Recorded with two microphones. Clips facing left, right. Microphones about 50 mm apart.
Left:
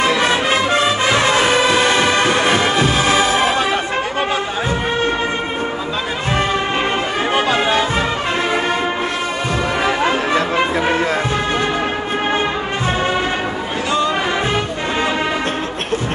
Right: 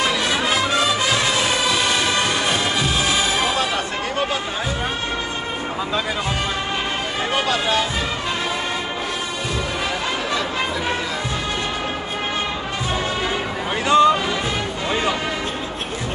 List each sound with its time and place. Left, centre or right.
0.0 s music: left
7.3 s music: left
13.8 s a sound: centre